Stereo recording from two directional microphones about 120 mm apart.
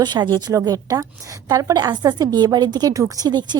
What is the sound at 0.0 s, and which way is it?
A woman's voice, 35° right (ahead or behind).